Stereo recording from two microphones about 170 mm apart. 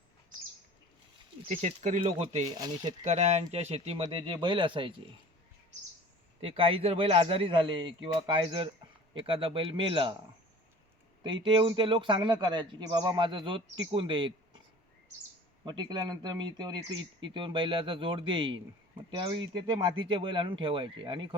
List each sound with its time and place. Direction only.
1.5 s speech: 45° right (ahead or behind)
2.6 s speech: 25° right (ahead or behind)
3.0 s a man's voice: 40° right (ahead or behind)
6.4 s a man's voice: 30° right (ahead or behind)
11.4 s speech: 25° right (ahead or behind)
15.6 s speech: 25° right (ahead or behind)